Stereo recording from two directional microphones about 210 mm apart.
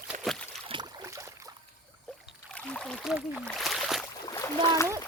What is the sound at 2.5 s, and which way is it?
Speech, 5° left (ahead or behind).